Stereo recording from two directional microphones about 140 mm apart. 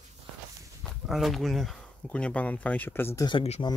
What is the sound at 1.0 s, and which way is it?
Speech, centre (ahead or behind).